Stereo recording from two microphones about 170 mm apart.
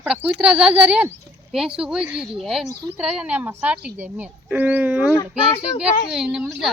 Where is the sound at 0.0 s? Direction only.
10° right (ahead or behind).